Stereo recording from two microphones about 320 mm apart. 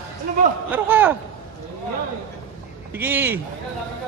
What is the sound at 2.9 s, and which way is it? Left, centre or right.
Speech, centre.